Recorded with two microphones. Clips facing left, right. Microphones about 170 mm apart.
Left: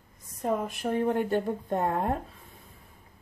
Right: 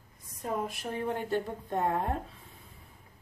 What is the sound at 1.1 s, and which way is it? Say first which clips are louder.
Speech: left 5 dB; 50° left (ahead or behind).